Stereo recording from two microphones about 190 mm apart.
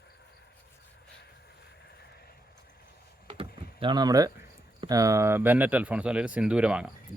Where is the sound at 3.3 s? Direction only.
30° right (ahead or behind).